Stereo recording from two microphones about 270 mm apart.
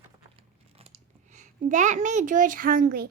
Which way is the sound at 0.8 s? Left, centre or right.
Right.